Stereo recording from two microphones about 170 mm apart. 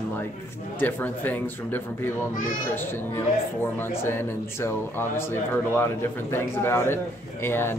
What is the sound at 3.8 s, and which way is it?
A man's voice, 15° left (ahead or behind).